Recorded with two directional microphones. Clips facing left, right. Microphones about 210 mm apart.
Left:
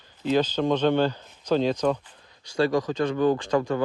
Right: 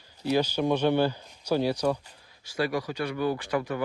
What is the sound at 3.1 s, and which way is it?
Speech, 45° left (ahead or behind).